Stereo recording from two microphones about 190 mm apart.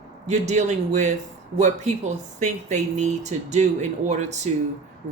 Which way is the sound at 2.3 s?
40° right (ahead or behind).